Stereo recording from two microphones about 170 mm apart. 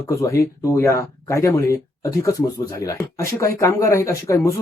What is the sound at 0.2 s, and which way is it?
Speech, 20° left (ahead or behind).